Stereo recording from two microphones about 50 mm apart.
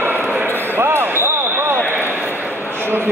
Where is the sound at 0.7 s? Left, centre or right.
Right.